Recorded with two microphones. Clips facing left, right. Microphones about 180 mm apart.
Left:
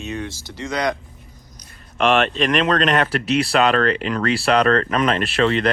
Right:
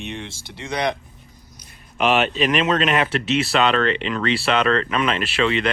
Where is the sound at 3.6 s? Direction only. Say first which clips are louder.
Left 2 dB; 40° left (ahead or behind).